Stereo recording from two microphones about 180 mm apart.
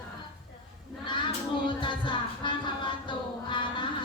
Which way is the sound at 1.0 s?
25° left (ahead or behind).